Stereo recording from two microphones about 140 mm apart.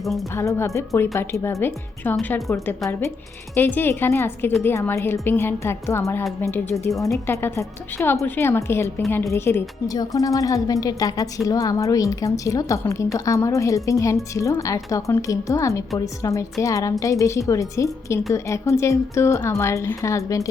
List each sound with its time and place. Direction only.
0.3 s a woman's voice: 20° left (ahead or behind)